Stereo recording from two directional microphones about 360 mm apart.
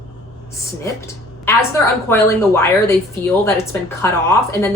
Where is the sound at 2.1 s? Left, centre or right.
Centre.